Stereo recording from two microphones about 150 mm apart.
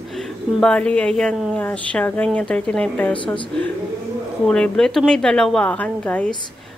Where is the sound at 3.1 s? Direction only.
35° left (ahead or behind).